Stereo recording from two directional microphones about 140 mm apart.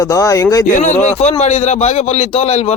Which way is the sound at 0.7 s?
60° left (ahead or behind).